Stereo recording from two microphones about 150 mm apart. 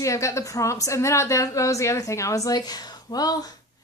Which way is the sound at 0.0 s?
20° left (ahead or behind).